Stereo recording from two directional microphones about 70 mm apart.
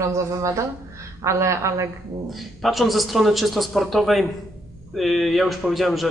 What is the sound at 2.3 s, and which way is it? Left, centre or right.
A man's voice, centre.